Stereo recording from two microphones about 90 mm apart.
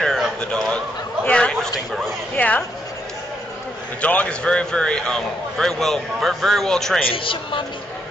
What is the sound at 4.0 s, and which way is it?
A man's voice, 15° left (ahead or behind).